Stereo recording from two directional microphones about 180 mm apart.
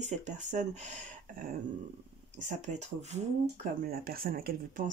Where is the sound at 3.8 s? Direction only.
55° right (ahead or behind).